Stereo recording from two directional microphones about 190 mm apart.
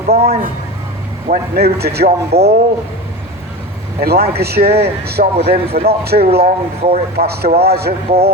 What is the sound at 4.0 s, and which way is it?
Speech, 55° right (ahead or behind).